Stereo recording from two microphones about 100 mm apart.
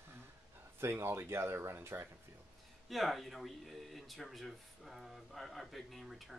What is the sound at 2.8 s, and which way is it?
Speech, centre (ahead or behind).